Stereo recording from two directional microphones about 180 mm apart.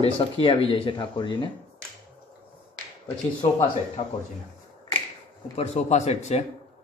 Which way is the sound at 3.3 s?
35° left (ahead or behind).